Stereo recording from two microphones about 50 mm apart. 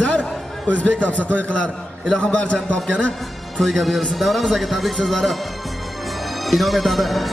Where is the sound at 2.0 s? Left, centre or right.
Centre.